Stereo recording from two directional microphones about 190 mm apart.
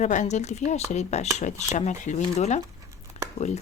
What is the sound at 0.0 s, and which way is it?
Speech, 40° left (ahead or behind).